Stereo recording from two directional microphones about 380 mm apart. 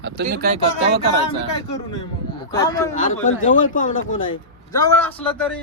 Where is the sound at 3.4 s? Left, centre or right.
Centre.